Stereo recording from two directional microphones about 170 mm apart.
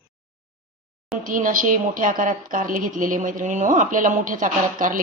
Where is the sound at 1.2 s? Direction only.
50° right (ahead or behind).